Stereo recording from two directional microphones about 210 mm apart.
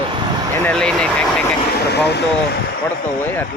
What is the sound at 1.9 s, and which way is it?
Speech, 50° left (ahead or behind).